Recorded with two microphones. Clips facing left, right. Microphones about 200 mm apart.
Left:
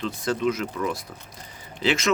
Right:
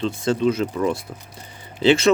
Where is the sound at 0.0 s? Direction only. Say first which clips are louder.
Right 5 dB; 25° right (ahead or behind).